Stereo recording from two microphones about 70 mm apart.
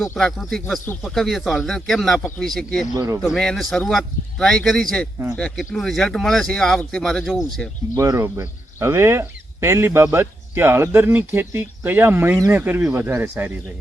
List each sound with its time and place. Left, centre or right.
0.2 s speech: centre
2.9 s speech: right
3.2 s speech: centre
7.9 s speech: right